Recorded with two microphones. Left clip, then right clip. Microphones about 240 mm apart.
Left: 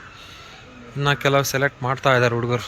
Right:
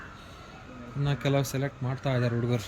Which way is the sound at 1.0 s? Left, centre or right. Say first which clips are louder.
Left 11 dB; centre.